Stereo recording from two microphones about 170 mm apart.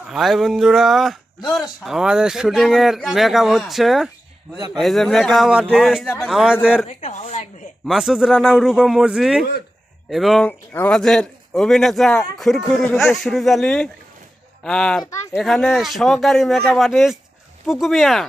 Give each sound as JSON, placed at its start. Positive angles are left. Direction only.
{"t": 0.1, "sound": "a man's voice", "side_deg": 0}
{"t": 7.0, "sound": "speech", "side_deg": 45}
{"t": 7.9, "sound": "a man's voice", "side_deg": 0}
{"t": 15.0, "sound": "speech", "side_deg": 15}
{"t": 15.4, "sound": "a man's voice", "side_deg": 0}